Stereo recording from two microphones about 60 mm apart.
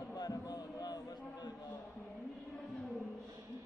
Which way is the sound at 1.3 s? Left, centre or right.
Left.